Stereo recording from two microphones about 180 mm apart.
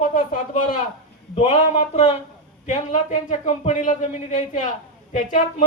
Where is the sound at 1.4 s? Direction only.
40° left (ahead or behind).